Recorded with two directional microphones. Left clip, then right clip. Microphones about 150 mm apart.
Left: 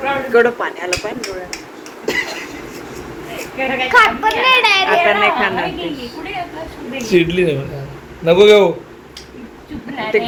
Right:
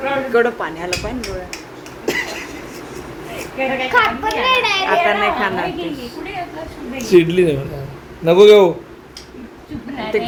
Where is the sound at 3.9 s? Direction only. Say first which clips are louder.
Left 5 dB; 45° left (ahead or behind).